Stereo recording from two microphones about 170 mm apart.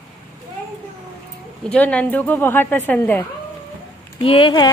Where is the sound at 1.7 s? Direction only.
5° left (ahead or behind).